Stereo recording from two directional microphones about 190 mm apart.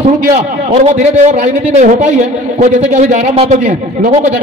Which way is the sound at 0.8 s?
35° right (ahead or behind).